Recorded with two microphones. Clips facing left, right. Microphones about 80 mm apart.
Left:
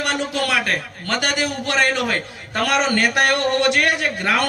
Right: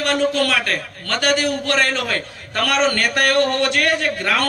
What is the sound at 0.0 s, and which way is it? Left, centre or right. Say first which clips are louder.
A man's voice: right 4 dB; centre.